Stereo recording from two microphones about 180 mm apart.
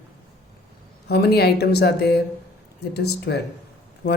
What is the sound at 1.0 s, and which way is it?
Speech, 65° left (ahead or behind).